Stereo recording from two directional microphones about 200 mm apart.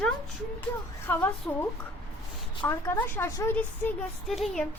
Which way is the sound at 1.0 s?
10° left (ahead or behind).